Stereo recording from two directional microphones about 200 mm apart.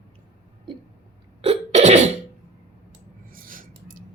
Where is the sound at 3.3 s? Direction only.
45° right (ahead or behind).